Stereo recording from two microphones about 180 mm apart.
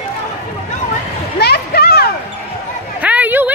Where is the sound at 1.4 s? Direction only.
60° left (ahead or behind).